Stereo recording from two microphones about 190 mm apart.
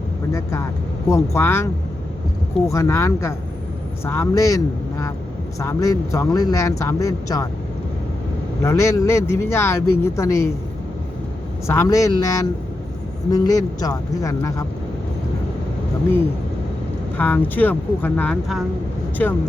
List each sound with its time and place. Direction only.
0.3 s speech: 15° left (ahead or behind)
8.6 s speech: 15° left (ahead or behind)
11.6 s a man's voice: 15° left (ahead or behind)
17.2 s speech: 10° left (ahead or behind)